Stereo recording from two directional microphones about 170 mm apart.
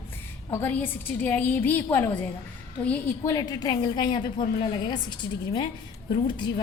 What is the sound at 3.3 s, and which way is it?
A woman's voice, 20° left (ahead or behind).